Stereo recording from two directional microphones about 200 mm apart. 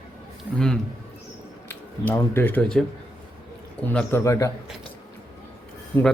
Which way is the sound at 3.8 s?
10° left (ahead or behind).